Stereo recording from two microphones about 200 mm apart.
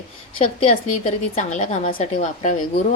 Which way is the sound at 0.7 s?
40° left (ahead or behind).